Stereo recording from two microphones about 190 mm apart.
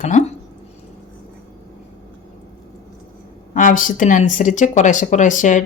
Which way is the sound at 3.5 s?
45° left (ahead or behind).